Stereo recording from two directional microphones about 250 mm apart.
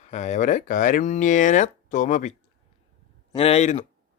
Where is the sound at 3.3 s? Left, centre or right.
Left.